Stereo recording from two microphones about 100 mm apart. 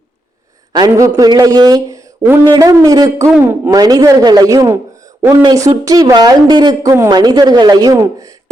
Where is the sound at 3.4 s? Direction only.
20° right (ahead or behind).